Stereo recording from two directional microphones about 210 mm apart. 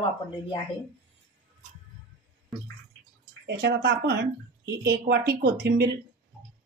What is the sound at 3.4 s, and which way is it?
A woman's voice, 50° right (ahead or behind).